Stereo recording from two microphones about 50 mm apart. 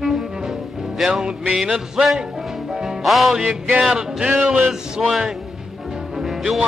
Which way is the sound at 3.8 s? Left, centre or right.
Centre.